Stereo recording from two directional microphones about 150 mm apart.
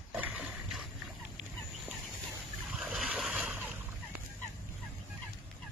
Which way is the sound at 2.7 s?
5° right (ahead or behind).